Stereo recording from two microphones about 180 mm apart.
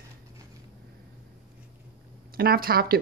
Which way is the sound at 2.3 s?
55° right (ahead or behind).